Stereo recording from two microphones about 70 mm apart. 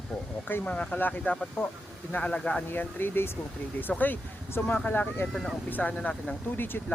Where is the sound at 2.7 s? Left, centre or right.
Left.